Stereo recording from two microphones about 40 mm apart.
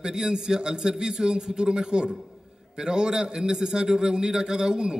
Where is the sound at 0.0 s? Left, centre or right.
Centre.